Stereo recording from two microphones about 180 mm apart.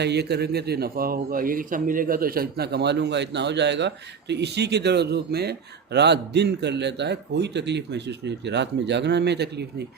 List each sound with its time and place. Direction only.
0.0 s speech: 70° right (ahead or behind)